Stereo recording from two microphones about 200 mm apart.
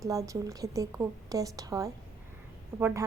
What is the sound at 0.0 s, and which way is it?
A woman's voice, 15° right (ahead or behind).